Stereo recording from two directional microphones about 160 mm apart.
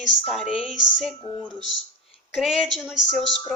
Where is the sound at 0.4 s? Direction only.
35° left (ahead or behind).